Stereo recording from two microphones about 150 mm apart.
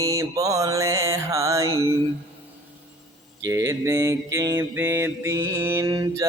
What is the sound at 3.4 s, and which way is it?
Mantra, 20° right (ahead or behind).